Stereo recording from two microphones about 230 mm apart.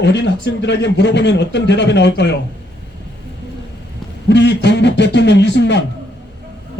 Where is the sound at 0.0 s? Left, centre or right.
Left.